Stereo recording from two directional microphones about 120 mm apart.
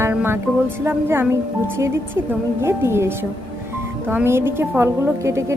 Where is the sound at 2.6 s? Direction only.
20° right (ahead or behind).